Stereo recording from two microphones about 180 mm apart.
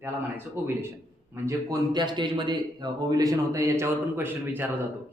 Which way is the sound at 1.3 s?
15° right (ahead or behind).